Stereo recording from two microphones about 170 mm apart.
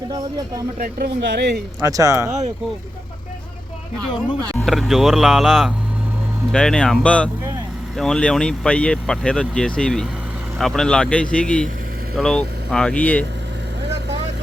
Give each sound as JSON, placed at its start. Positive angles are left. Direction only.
{"t": 0.1, "sound": "speech", "side_deg": -25}
{"t": 0.8, "sound": "speech", "side_deg": -65}
{"t": 1.8, "sound": "speech", "side_deg": -20}
{"t": 4.6, "sound": "speech", "side_deg": 0}